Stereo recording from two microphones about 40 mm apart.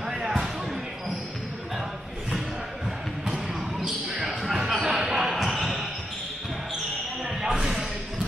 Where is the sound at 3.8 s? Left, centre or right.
Centre.